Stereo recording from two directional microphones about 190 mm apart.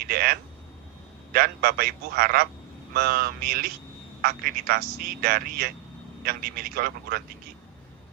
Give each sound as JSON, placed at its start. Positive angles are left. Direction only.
{"t": 0.0, "sound": "speech", "side_deg": -50}